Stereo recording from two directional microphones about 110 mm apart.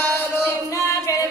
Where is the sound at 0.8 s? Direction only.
30° left (ahead or behind).